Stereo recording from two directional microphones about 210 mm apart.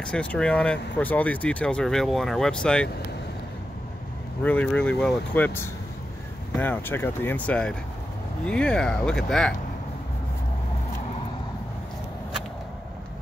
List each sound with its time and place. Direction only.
0.0 s speech: 5° left (ahead or behind)
4.4 s speech: 5° left (ahead or behind)